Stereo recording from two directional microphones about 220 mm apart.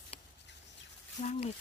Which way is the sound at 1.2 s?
30° left (ahead or behind).